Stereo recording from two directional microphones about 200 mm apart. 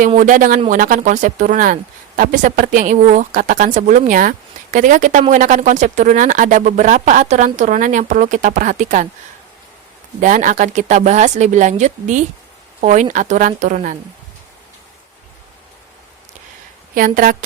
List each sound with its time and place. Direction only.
0.0 s speech: 40° right (ahead or behind)
10.2 s speech: 40° right (ahead or behind)
16.9 s a woman's voice: 45° right (ahead or behind)